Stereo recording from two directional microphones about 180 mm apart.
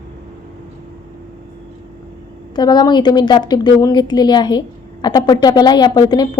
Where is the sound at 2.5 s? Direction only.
25° left (ahead or behind).